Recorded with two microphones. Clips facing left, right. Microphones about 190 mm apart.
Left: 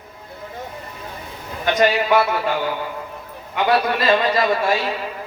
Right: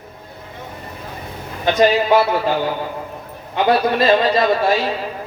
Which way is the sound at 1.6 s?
25° right (ahead or behind).